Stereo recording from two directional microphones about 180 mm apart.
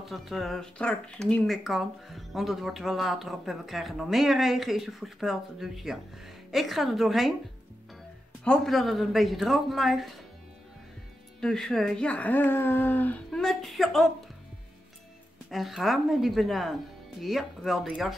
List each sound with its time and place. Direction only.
0.0 s speech: centre (ahead or behind)
8.5 s speech: centre (ahead or behind)
11.4 s speech: 5° left (ahead or behind)
15.5 s speech: centre (ahead or behind)